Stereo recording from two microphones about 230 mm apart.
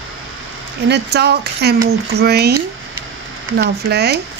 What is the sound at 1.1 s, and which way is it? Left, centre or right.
Speech, right.